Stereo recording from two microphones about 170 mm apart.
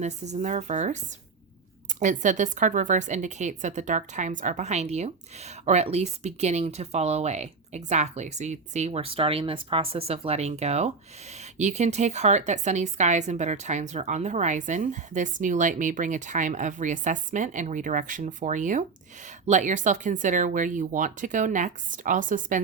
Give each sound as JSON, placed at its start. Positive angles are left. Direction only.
{"t": 0.0, "sound": "a woman's voice", "side_deg": -45}
{"t": 2.0, "sound": "a woman's voice", "side_deg": -45}